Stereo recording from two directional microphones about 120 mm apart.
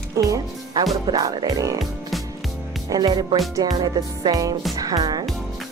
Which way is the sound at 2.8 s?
35° right (ahead or behind).